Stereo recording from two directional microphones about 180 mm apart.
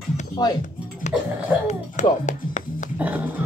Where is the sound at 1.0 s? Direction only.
40° left (ahead or behind).